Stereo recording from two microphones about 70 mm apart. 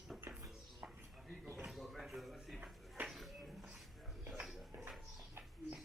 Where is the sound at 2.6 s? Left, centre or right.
Centre.